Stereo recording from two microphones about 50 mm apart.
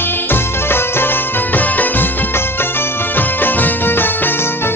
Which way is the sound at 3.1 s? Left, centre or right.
Left.